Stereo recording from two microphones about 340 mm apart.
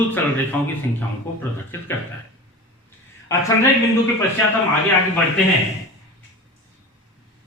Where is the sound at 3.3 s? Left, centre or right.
Centre.